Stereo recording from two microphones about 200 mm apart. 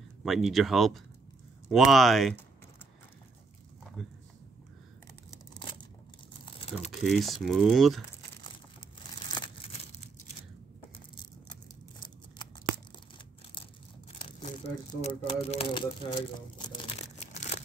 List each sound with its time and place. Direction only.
0.2 s speech: centre (ahead or behind)
5.5 s a sound: 25° left (ahead or behind)
6.4 s typing: 30° left (ahead or behind)
7.0 s speech: centre (ahead or behind)
9.3 s crumpling: 25° left (ahead or behind)
12.0 s tearing: 20° left (ahead or behind)
15.0 s speech: 30° left (ahead or behind)